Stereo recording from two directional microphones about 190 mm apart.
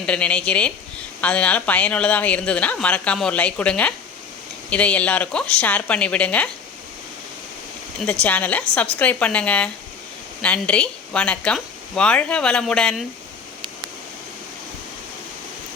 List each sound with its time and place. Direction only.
0.0 s speech: 5° left (ahead or behind)
8.2 s speech: 10° left (ahead or behind)